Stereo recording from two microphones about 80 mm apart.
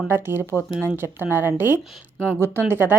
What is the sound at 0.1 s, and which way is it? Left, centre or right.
Speech, right.